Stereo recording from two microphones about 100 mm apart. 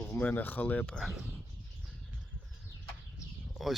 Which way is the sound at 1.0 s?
5° right (ahead or behind).